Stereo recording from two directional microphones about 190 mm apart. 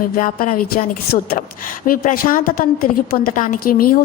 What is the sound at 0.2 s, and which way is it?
A woman's voice, 50° left (ahead or behind).